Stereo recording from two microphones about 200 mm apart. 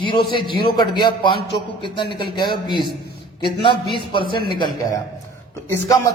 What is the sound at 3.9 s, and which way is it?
Speech, 25° left (ahead or behind).